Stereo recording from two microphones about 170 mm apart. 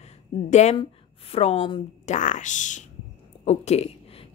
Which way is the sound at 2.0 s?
45° left (ahead or behind).